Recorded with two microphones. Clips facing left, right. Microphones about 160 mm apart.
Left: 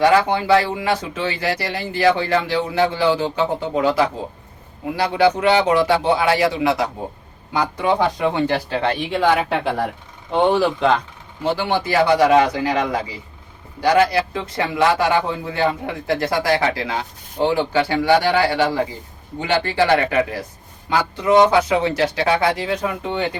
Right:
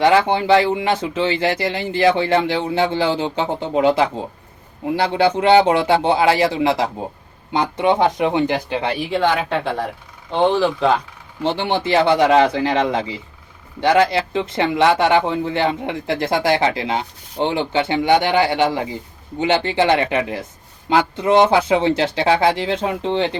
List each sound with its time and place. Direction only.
0.0 s speech: 25° right (ahead or behind)
9.0 s a woman's voice: centre (ahead or behind)
11.5 s speech: 25° right (ahead or behind)